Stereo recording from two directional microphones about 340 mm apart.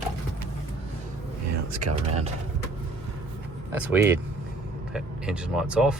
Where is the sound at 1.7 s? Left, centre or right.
Right.